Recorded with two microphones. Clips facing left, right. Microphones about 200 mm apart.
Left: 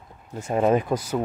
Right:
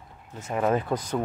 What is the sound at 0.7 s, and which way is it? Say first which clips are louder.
Speech: left 4 dB; 10° left (ahead or behind).